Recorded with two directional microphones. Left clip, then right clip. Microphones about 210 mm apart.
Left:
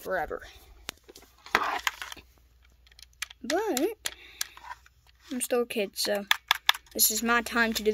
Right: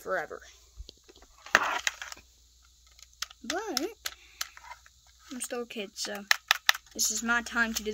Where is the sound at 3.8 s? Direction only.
25° left (ahead or behind).